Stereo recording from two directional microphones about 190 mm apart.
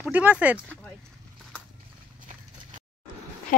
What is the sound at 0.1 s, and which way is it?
Speech, 5° right (ahead or behind).